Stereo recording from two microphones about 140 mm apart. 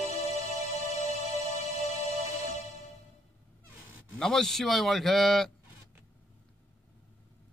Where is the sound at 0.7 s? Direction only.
55° right (ahead or behind).